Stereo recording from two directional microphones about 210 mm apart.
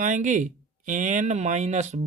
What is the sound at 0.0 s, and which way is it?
Speech, 35° right (ahead or behind).